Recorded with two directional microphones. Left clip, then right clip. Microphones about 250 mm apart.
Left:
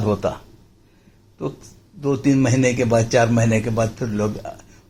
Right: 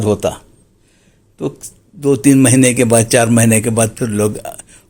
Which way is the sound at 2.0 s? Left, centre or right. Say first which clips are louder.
Right 8 dB; right.